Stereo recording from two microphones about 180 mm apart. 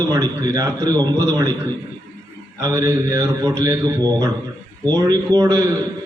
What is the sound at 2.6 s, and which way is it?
A man's voice, 20° right (ahead or behind).